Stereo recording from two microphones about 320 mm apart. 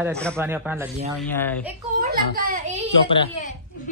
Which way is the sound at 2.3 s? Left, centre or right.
Right.